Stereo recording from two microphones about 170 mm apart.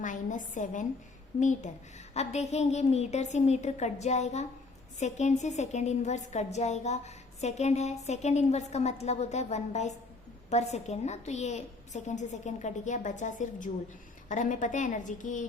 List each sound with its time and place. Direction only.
0.0 s a woman's voice: 50° left (ahead or behind)